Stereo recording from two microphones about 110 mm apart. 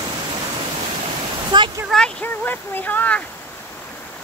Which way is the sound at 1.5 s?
45° right (ahead or behind).